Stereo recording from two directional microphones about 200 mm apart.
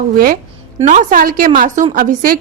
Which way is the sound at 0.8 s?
40° right (ahead or behind).